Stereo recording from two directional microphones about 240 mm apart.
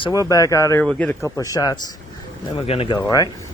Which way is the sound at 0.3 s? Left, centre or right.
Centre.